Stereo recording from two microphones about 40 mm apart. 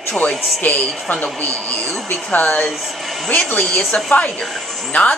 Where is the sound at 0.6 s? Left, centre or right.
Left.